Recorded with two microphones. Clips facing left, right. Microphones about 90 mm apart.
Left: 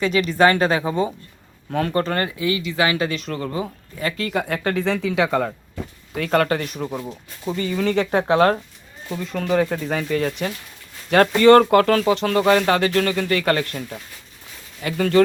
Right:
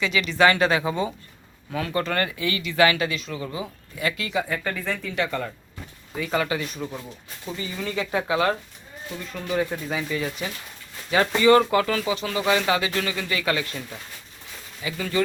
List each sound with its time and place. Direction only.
0.0 s speech: 45° left (ahead or behind); by 3.1 s 25° left (ahead or behind)
3.2 s speech: 55° left (ahead or behind)
4.4 s speech: 70° left (ahead or behind); by 5.5 s 90° left
6.1 s speech: 65° left (ahead or behind)
6.7 s speech: 20° left (ahead or behind)
7.5 s speech: 50° left (ahead or behind)
9.2 s speech: 90° left
9.5 s speech: 55° left (ahead or behind)